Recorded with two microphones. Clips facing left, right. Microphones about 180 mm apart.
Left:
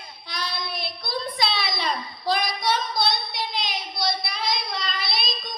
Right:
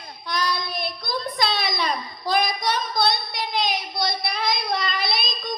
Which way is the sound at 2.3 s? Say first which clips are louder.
Right 1 dB; 50° right (ahead or behind).